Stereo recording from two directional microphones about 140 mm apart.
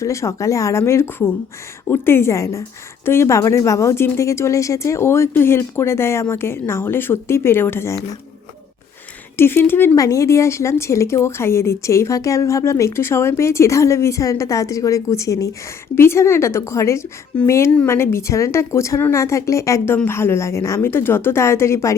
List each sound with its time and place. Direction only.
0.0 s speech: 20° left (ahead or behind)
9.4 s speech: 15° left (ahead or behind)